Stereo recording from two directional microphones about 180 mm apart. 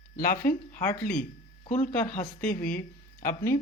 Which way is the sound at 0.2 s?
50° left (ahead or behind).